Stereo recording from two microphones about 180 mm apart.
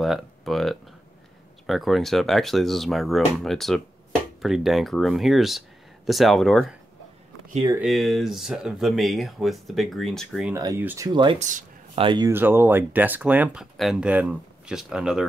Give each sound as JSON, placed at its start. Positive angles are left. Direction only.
{"t": 0.0, "sound": "speech", "side_deg": 0}
{"t": 7.8, "sound": "speech", "side_deg": 0}
{"t": 10.5, "sound": "speech", "side_deg": -15}
{"t": 11.1, "sound": "speech", "side_deg": -25}
{"t": 11.3, "sound": "a sound", "side_deg": -40}
{"t": 12.0, "sound": "speech", "side_deg": -25}
{"t": 12.3, "sound": "speech", "side_deg": -10}